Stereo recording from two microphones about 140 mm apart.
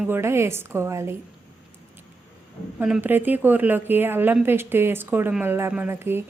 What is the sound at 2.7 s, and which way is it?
A woman's voice, 5° right (ahead or behind).